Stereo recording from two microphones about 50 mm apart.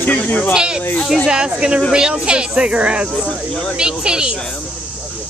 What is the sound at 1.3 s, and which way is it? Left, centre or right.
Speech, centre.